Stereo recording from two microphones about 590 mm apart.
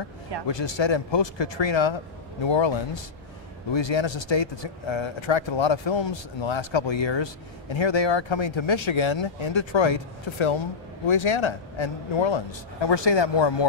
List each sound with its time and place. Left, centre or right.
0.5 s speech: left